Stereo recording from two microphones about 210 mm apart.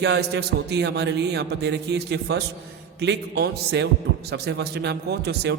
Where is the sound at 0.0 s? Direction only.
50° right (ahead or behind).